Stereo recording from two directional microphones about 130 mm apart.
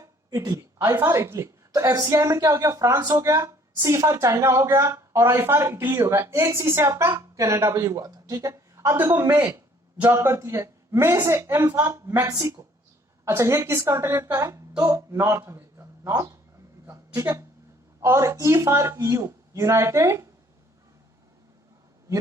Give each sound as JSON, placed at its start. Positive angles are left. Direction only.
{"t": 0.3, "sound": "a woman's voice", "side_deg": -30}
{"t": 16.8, "sound": "a sound", "side_deg": -25}
{"t": 18.0, "sound": "a woman's voice", "side_deg": -20}